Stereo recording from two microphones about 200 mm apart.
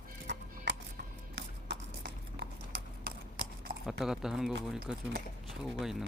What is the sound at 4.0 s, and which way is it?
Speech, centre (ahead or behind).